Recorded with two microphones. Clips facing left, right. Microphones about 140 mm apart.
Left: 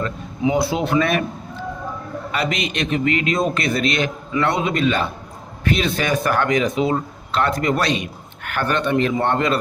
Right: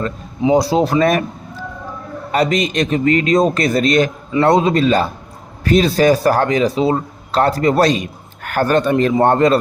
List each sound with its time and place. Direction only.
0.0 s speech: 35° right (ahead or behind)
2.3 s speech: 40° right (ahead or behind)